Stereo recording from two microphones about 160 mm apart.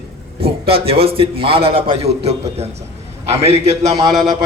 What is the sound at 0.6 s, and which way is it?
Speech, 35° right (ahead or behind).